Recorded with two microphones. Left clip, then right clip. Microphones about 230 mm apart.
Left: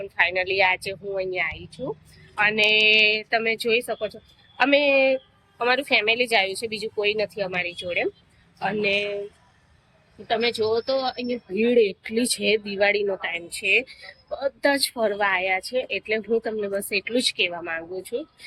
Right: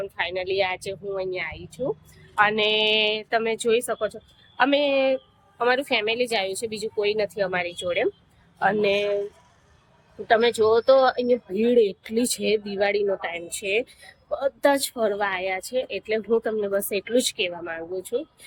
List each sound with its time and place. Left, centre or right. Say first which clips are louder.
0.0 s a woman's voice: left 5 dB; centre
10.2 s speech: right 4 dB; centre
11.5 s a woman's voice: left 3 dB; centre